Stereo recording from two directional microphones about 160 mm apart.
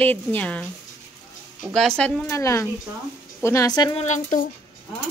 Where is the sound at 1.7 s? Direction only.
5° left (ahead or behind).